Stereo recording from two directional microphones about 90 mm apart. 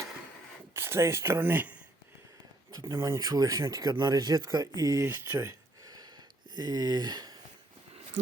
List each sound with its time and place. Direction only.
0.8 s speech: 30° right (ahead or behind)
2.7 s speech: 40° right (ahead or behind)
5.0 s a sound: 30° right (ahead or behind)
6.6 s speech: 50° right (ahead or behind)